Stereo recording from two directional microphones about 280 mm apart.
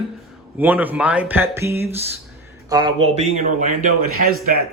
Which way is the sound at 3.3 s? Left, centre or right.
Right.